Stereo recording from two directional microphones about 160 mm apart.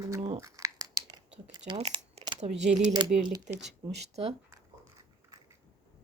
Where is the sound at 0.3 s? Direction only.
20° right (ahead or behind).